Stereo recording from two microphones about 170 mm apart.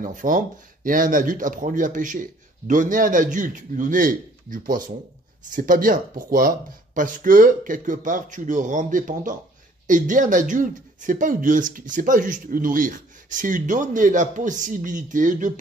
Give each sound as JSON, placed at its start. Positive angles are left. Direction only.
{"t": 0.0, "sound": "speech", "side_deg": -50}